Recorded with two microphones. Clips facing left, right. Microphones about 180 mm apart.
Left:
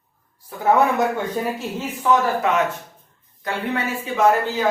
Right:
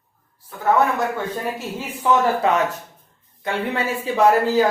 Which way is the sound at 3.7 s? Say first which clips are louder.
Right 1 dB; 35° right (ahead or behind).